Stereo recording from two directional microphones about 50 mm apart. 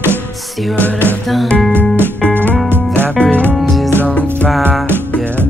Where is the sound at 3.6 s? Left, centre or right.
Centre.